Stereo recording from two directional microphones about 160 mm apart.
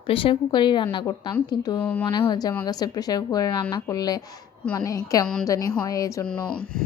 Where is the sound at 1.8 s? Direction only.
10° left (ahead or behind).